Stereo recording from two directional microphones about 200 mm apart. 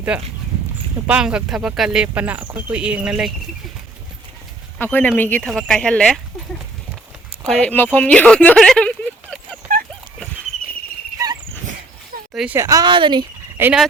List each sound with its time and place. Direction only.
0.1 s speech: 5° right (ahead or behind)
4.8 s speech: 10° left (ahead or behind)
7.6 s speech: 10° left (ahead or behind)
12.3 s a sound: centre (ahead or behind)
12.5 s a woman's voice: 15° right (ahead or behind)
13.6 s speech: 10° right (ahead or behind)